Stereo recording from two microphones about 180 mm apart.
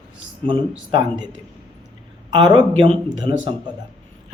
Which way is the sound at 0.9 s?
25° right (ahead or behind).